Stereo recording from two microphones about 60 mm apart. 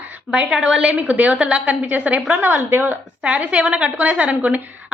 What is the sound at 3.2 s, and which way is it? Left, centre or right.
A woman's voice, centre.